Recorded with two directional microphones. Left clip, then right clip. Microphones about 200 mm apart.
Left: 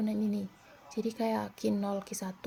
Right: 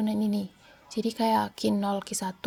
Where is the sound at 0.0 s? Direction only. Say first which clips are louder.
Right 5 dB; 50° right (ahead or behind).